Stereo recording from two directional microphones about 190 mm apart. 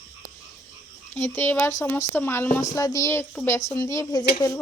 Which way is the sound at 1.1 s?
10° left (ahead or behind).